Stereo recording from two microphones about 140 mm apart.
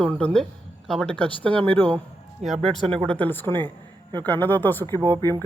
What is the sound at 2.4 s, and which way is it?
Speech, 50° right (ahead or behind).